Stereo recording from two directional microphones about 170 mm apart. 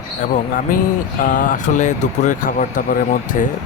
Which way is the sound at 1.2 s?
50° left (ahead or behind).